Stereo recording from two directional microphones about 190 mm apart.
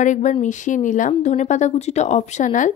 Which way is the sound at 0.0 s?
40° left (ahead or behind).